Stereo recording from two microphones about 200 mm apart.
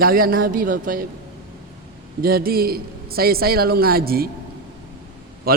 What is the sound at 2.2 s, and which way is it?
A man's voice, 50° right (ahead or behind).